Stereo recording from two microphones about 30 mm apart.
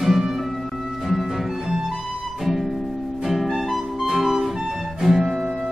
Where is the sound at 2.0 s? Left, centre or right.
Centre.